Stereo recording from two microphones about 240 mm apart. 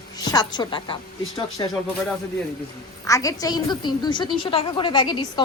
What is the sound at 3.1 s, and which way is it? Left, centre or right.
A woman's voice, centre.